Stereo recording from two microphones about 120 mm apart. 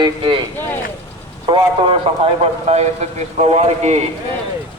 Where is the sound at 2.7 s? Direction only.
60° right (ahead or behind).